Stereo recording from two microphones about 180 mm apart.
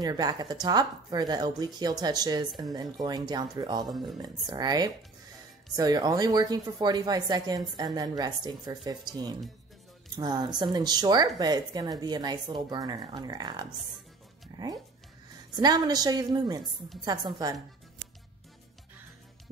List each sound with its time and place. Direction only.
0.0 s a woman's voice: 20° right (ahead or behind)
14.5 s music: 20° right (ahead or behind)
15.5 s a woman's voice: 20° right (ahead or behind)